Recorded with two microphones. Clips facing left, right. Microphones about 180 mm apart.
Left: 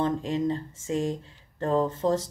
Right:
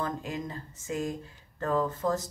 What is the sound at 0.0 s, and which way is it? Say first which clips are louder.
Speech: left 8 dB; 25° left (ahead or behind).